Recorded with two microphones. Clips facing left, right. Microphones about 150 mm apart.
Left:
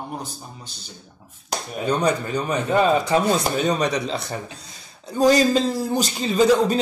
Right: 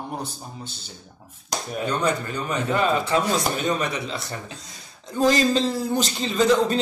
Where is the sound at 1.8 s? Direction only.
15° left (ahead or behind).